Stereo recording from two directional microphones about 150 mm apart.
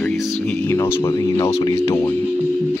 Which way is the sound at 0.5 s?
10° left (ahead or behind).